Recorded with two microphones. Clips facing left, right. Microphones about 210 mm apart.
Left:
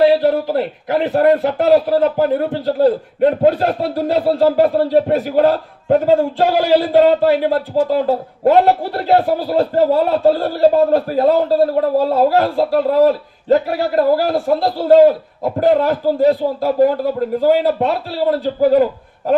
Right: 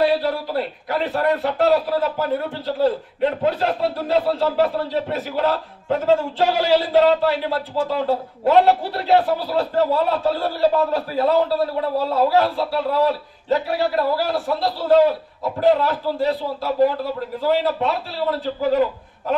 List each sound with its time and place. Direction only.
0.2 s a man's voice: 50° left (ahead or behind)
13.7 s a sound: 50° left (ahead or behind)
15.6 s a man's voice: 50° left (ahead or behind)